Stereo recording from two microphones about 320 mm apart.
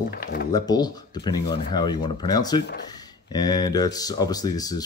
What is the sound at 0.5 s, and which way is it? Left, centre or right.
Speech, centre.